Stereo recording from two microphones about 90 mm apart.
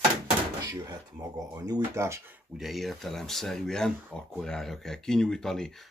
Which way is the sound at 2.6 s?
Centre (ahead or behind).